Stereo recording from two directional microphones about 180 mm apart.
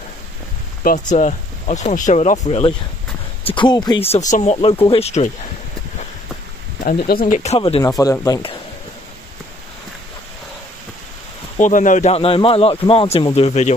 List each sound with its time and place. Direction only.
0.8 s a man's voice: 45° left (ahead or behind)
3.5 s a man's voice: 25° left (ahead or behind)
7.1 s speech: 55° left (ahead or behind)
7.3 s a man's voice: 35° left (ahead or behind)
8.0 s speech: 20° left (ahead or behind)
11.5 s a man's voice: 45° left (ahead or behind)